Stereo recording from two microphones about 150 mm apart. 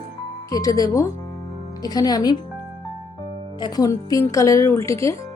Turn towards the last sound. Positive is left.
turn(degrees=20)  # may be behind; listen again after turning